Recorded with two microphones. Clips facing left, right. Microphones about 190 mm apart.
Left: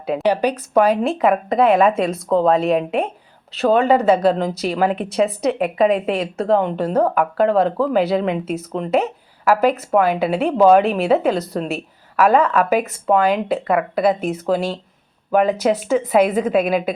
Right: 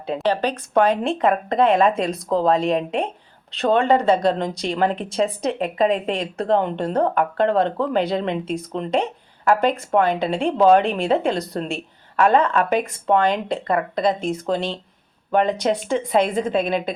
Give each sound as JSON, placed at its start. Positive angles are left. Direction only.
{"t": 0.0, "sound": "a woman's voice", "side_deg": 10}